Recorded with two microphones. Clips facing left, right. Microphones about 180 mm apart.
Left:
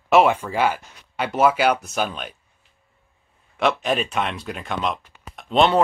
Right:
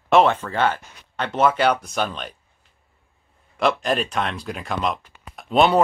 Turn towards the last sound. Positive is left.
turn(degrees=-5)  # may be behind; listen again after turning